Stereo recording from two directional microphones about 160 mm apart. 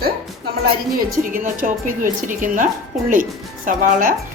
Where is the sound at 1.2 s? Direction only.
60° right (ahead or behind).